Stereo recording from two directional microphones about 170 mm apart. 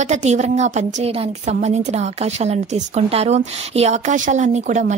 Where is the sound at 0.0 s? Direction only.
40° right (ahead or behind).